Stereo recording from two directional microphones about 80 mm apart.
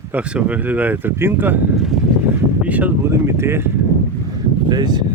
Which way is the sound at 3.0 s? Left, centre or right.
Right.